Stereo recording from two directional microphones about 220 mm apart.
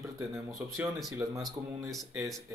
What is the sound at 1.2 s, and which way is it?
Speech, 15° right (ahead or behind).